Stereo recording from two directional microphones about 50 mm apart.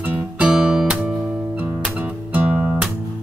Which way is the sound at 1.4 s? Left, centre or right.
Right.